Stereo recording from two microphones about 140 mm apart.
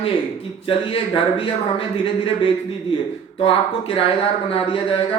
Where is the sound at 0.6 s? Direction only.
40° left (ahead or behind).